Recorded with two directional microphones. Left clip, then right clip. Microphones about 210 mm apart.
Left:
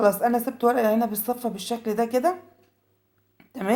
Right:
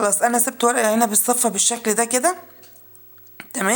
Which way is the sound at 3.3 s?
20° right (ahead or behind).